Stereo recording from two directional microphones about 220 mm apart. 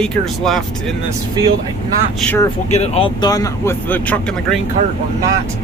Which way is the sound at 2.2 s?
10° left (ahead or behind).